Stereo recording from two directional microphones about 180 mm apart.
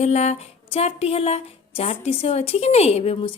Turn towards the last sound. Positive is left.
turn(degrees=30)  # may be behind; listen again after turning